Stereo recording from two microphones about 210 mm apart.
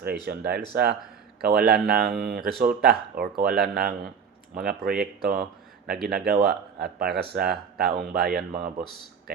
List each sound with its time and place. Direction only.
0.3 s speech: 50° right (ahead or behind)